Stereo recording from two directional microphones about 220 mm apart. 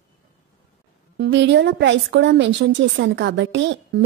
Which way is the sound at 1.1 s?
50° right (ahead or behind).